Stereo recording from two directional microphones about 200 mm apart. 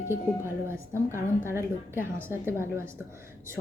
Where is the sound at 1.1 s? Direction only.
15° right (ahead or behind).